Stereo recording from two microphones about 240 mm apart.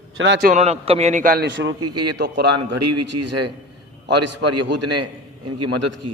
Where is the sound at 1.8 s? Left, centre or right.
Right.